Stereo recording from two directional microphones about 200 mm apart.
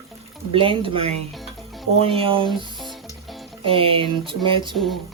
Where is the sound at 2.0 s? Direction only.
30° right (ahead or behind).